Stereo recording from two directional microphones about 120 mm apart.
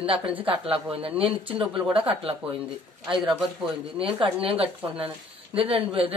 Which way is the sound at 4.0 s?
50° right (ahead or behind).